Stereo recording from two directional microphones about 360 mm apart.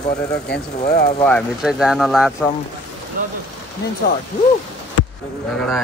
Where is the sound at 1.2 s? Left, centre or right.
Centre.